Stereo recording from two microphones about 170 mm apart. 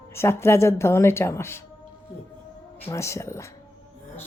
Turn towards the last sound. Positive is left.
turn(degrees=15)  # may be behind; listen again after turning